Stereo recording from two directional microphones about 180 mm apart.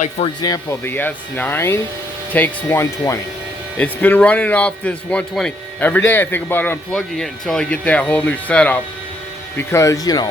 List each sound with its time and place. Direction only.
0.4 s a man's voice: 20° left (ahead or behind)